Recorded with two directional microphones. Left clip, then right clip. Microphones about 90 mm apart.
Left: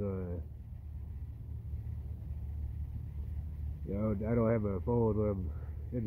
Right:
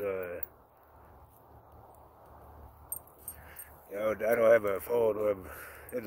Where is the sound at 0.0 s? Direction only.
10° right (ahead or behind).